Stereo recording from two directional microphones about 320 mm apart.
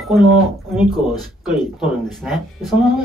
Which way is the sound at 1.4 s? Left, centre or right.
Centre.